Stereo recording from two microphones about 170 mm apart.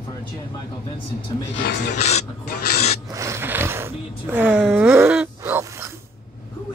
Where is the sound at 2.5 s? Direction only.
70° left (ahead or behind).